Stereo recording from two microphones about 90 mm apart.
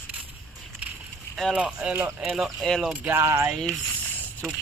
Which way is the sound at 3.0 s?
25° right (ahead or behind).